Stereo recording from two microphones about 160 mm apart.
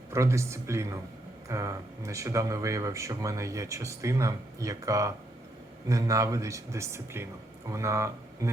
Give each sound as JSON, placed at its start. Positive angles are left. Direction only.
{"t": 0.1, "sound": "speech", "side_deg": -20}